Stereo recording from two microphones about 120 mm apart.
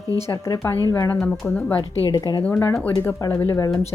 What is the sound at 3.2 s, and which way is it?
Speech, 25° left (ahead or behind).